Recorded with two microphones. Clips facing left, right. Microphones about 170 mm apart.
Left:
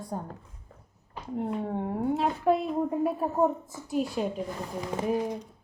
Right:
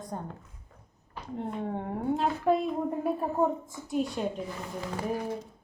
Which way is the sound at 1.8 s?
5° left (ahead or behind).